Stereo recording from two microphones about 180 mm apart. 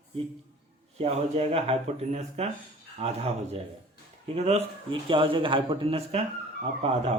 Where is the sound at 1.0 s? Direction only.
35° right (ahead or behind).